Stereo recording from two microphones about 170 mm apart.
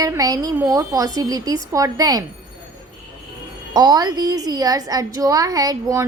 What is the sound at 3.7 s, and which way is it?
A woman's voice, 25° right (ahead or behind).